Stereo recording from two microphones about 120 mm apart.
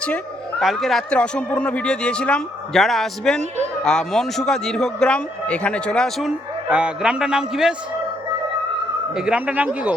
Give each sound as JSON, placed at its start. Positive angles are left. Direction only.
{"t": 0.6, "sound": "a man's voice", "side_deg": 0}
{"t": 6.7, "sound": "a man's voice", "side_deg": -10}
{"t": 9.1, "sound": "a man's voice", "side_deg": -10}